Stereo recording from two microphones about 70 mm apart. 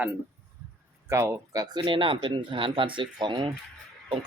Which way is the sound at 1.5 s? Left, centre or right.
Right.